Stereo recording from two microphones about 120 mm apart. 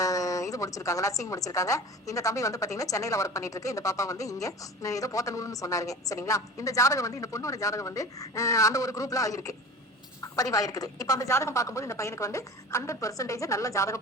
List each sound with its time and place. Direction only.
0.0 s a woman's voice: 30° left (ahead or behind)